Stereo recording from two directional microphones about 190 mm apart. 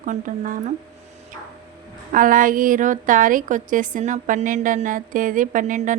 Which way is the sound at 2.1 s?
45° right (ahead or behind).